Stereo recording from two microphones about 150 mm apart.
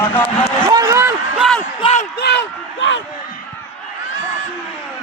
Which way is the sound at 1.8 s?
45° left (ahead or behind).